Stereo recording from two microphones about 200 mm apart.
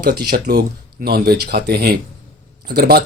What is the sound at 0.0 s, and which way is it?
Speech, 50° right (ahead or behind).